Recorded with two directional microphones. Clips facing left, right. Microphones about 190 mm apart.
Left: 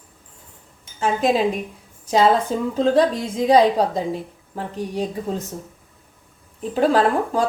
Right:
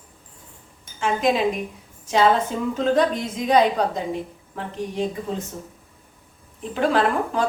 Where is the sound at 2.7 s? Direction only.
35° left (ahead or behind).